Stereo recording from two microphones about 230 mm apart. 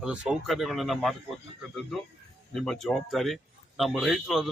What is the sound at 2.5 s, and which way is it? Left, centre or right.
A man's voice, centre.